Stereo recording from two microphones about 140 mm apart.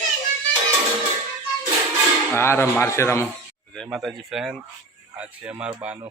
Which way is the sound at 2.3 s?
15° left (ahead or behind).